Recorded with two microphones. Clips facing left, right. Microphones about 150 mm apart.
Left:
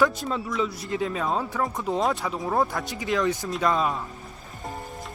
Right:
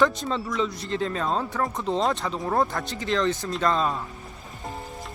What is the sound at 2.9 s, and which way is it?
Speech, 15° left (ahead or behind).